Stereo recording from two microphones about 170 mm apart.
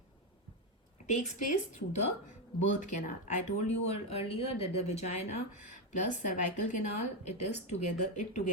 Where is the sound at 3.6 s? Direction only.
40° left (ahead or behind).